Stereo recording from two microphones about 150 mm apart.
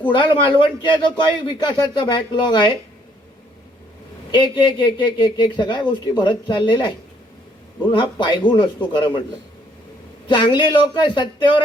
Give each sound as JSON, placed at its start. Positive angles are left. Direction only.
{"t": 0.1, "sound": "speech", "side_deg": 30}
{"t": 4.3, "sound": "speech", "side_deg": 30}
{"t": 10.2, "sound": "speech", "side_deg": 30}